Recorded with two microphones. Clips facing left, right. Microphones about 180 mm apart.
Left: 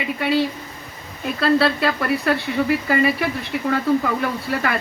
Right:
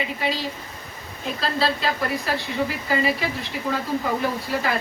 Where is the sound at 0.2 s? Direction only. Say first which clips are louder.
Left 7 dB; 60° left (ahead or behind).